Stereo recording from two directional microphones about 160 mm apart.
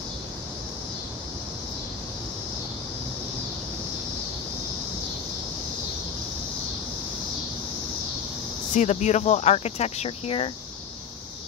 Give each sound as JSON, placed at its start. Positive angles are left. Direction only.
{"t": 8.7, "sound": "speech", "side_deg": 45}